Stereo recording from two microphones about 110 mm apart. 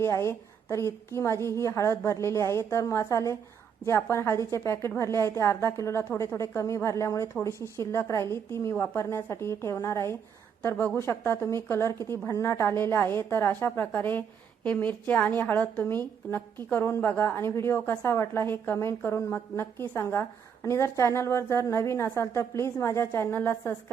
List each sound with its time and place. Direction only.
0.0 s a woman's voice: 25° left (ahead or behind)